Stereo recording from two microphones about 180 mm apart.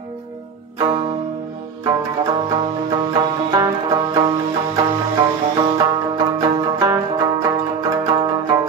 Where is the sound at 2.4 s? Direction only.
25° right (ahead or behind).